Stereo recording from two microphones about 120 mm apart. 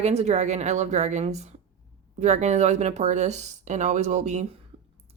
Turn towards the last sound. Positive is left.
turn(degrees=-75)  # may be behind; listen again after turning